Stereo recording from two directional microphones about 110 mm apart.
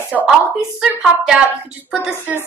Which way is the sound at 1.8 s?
5° right (ahead or behind).